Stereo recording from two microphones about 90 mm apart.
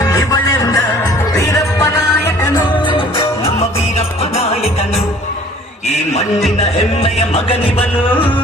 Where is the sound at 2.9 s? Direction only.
70° left (ahead or behind); by 3.6 s 90° left.